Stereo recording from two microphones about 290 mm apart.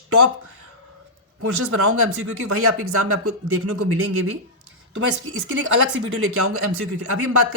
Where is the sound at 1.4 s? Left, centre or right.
Right.